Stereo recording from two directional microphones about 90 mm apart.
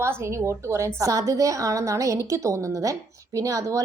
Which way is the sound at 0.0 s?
30° right (ahead or behind).